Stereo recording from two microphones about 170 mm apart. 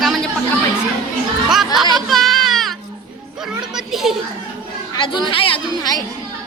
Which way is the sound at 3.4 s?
5° right (ahead or behind).